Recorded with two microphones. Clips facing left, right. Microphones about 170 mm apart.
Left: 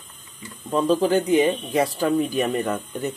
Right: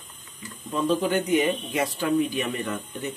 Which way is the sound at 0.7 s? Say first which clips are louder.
Left 4 dB; 35° left (ahead or behind).